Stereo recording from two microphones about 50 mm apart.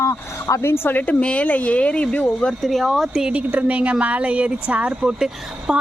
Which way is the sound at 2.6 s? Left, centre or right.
Centre.